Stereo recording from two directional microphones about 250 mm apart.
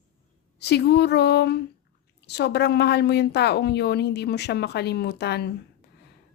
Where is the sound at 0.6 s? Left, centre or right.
Left.